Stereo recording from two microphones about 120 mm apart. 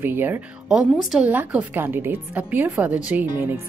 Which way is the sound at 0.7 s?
5° right (ahead or behind).